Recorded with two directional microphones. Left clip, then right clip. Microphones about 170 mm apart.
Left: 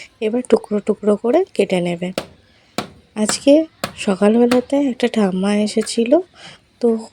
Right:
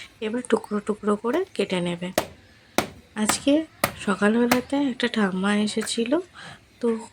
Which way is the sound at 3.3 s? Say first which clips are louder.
Left 11 dB; 20° left (ahead or behind).